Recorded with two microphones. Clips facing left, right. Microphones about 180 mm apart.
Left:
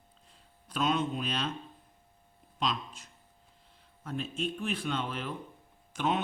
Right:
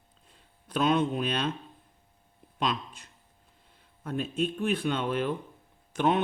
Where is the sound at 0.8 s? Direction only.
55° right (ahead or behind).